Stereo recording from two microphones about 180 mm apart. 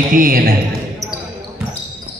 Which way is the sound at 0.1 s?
50° right (ahead or behind).